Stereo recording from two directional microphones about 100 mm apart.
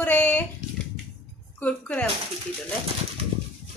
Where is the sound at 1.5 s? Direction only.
15° left (ahead or behind).